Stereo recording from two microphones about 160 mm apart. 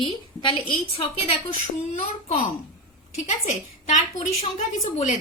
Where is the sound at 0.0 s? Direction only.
30° left (ahead or behind).